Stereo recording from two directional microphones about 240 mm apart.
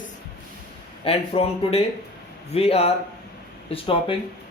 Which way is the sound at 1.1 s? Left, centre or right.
Left.